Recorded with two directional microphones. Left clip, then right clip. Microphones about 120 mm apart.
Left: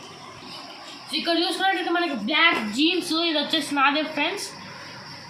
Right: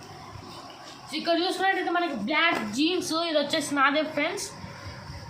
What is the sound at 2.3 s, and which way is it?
Speech, 30° right (ahead or behind).